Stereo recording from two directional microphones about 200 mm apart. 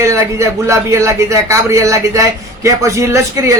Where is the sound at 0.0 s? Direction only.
15° right (ahead or behind).